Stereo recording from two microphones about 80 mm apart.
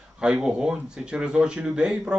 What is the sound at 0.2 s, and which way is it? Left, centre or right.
Speech, centre.